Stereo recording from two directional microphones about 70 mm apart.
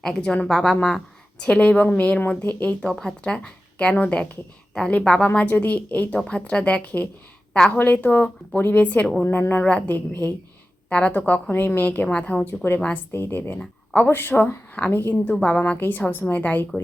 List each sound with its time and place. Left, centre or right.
0.4 s speech: centre
1.5 s a woman's voice: centre
2.9 s a woman's voice: centre; by 10.2 s left
10.8 s a woman's voice: centre
11.5 s speech: left
11.8 s a woman's voice: left